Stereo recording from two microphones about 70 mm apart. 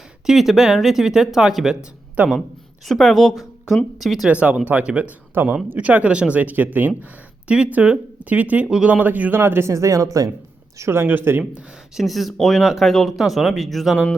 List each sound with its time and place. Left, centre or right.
0.3 s speech: centre
2.8 s speech: centre
4.3 s speech: centre
5.3 s speech: right
9.4 s speech: right
10.8 s speech: right
11.9 s speech: centre